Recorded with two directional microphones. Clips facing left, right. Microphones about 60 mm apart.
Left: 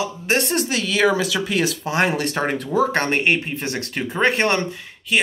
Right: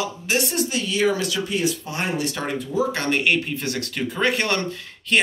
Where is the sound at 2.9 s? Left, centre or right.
Left.